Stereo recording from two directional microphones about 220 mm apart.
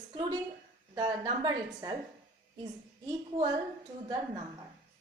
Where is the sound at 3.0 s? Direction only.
20° right (ahead or behind).